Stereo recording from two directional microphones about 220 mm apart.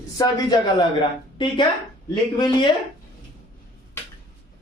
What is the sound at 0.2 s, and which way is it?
Speech, 20° left (ahead or behind).